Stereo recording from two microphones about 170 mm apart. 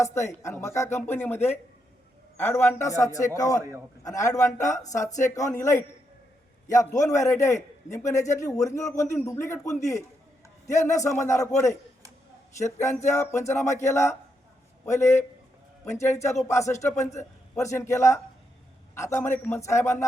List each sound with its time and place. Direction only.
0.0 s a man's voice: 15° left (ahead or behind)